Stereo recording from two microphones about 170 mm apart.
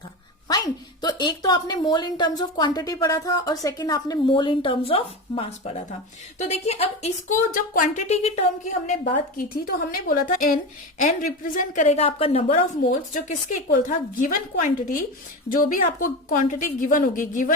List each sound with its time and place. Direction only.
0.4 s a woman's voice: 25° left (ahead or behind); by 8.4 s 40° left (ahead or behind)
9.4 s a woman's voice: 55° left (ahead or behind)